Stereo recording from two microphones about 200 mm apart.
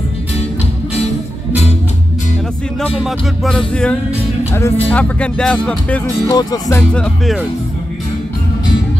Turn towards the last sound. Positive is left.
turn(degrees=5)  # may be behind; listen again after turning